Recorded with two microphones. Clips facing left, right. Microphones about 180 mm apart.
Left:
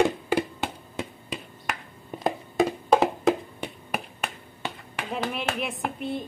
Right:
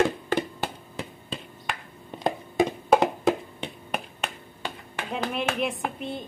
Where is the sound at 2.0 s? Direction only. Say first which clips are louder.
Even; 5° left (ahead or behind).